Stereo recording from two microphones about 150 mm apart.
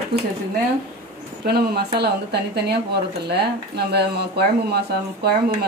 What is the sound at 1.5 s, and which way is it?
Speech, 90° right.